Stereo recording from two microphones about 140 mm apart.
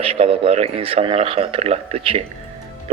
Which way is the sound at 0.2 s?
45° right (ahead or behind).